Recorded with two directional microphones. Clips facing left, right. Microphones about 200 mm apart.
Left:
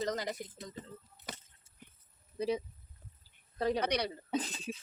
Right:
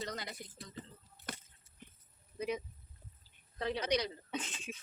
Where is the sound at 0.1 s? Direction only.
40° left (ahead or behind).